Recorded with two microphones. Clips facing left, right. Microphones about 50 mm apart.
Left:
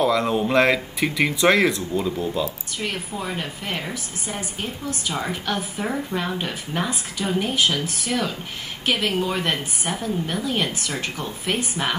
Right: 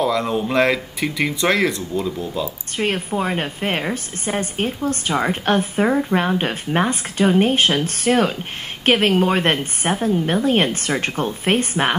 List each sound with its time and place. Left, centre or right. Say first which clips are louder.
0.0 s speech: even; centre
2.8 s a woman's voice: right 8 dB; right
6.1 s a woman's voice: right 7 dB; right